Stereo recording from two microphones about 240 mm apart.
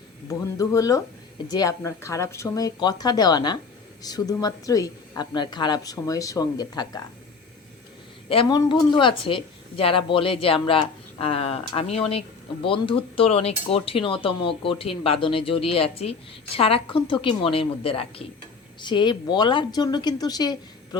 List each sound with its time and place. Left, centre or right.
0.3 s speech: centre
8.3 s speech: centre